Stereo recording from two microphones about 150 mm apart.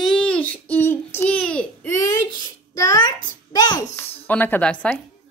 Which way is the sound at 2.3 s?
25° left (ahead or behind).